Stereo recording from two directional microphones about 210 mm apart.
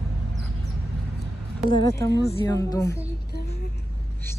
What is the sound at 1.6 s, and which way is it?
A man's voice, 20° left (ahead or behind).